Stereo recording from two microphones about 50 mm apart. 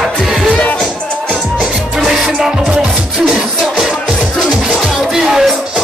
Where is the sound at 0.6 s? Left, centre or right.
Left.